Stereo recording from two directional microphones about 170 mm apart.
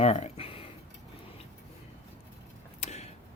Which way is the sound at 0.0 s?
35° left (ahead or behind).